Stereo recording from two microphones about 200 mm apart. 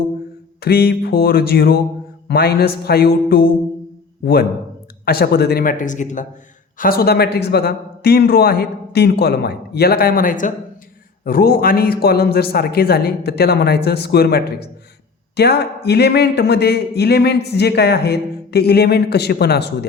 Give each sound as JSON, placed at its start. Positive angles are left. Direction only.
{"t": 0.6, "sound": "a man's voice", "side_deg": 50}